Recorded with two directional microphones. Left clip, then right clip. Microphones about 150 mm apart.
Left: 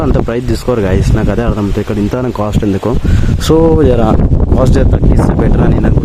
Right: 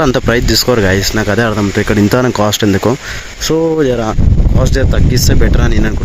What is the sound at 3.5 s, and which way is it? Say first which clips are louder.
Speech: left 3 dB; 15° left (ahead or behind).